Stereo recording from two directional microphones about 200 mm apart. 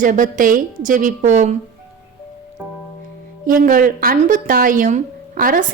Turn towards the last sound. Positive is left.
turn(degrees=-45)  # may be behind; listen again after turning